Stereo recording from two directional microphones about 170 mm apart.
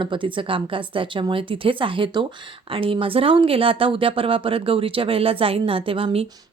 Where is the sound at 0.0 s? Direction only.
30° right (ahead or behind).